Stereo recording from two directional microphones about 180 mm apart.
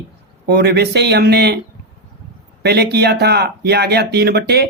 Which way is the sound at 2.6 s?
65° right (ahead or behind).